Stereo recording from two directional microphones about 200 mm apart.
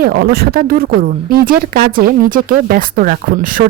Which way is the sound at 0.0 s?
50° right (ahead or behind).